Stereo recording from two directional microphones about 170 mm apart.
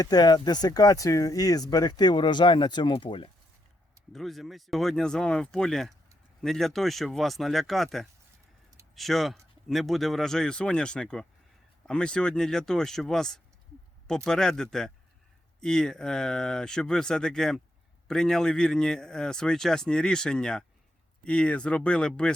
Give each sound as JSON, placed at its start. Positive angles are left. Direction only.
{"t": 0.0, "sound": "speech", "side_deg": 25}
{"t": 4.1, "sound": "speech", "side_deg": 0}